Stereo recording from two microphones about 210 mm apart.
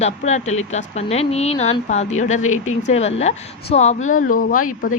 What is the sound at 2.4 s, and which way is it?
Speech, 80° left.